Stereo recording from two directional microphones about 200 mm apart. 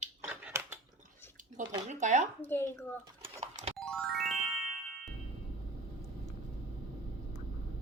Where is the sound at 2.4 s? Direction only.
10° left (ahead or behind).